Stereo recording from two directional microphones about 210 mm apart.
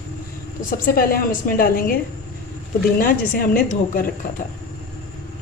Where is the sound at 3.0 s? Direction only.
40° left (ahead or behind).